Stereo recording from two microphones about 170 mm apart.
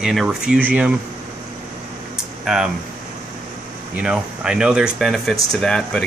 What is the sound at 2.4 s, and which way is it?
Speech, 5° right (ahead or behind).